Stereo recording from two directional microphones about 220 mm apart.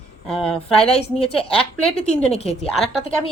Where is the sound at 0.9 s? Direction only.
25° left (ahead or behind).